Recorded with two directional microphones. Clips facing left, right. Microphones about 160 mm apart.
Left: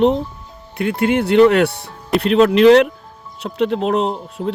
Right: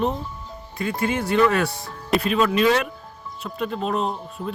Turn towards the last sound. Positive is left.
turn(degrees=85)